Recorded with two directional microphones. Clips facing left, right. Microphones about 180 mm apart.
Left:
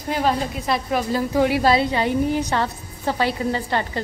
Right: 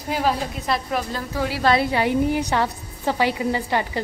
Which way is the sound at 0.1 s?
5° right (ahead or behind).